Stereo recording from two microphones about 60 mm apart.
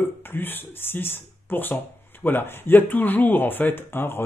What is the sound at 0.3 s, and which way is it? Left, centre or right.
Speech, left.